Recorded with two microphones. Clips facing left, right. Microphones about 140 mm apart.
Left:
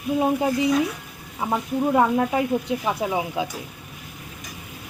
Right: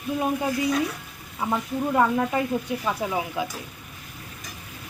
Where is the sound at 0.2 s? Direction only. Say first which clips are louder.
Left 4 dB; 25° left (ahead or behind).